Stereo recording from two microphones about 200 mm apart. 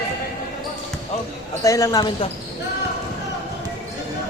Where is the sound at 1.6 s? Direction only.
15° left (ahead or behind).